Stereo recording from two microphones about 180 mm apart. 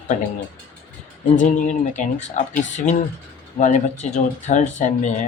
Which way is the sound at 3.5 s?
45° left (ahead or behind).